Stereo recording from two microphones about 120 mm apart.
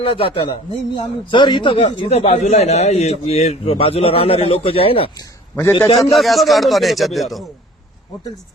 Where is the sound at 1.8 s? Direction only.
70° left (ahead or behind); by 5.1 s 50° left (ahead or behind).